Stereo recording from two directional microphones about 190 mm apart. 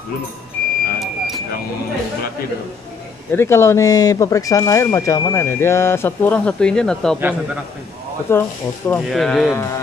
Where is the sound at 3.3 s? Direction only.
15° left (ahead or behind).